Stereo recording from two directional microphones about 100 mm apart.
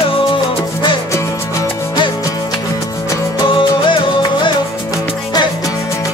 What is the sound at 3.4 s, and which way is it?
Music, 60° left (ahead or behind).